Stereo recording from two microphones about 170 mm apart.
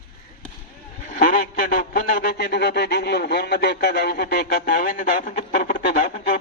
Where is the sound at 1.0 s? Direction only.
50° left (ahead or behind).